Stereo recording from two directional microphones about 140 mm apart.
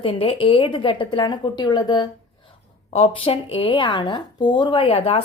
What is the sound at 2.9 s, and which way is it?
A woman's voice, 45° left (ahead or behind).